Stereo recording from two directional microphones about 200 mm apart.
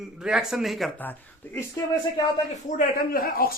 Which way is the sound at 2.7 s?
45° left (ahead or behind).